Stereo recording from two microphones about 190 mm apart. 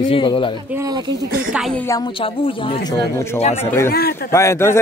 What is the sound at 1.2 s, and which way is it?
Speech, 55° right (ahead or behind).